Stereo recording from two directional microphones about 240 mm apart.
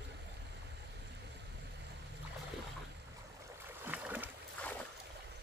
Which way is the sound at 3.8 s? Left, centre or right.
Centre.